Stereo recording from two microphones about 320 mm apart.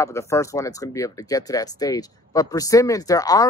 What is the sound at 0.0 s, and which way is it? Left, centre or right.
Speech, centre.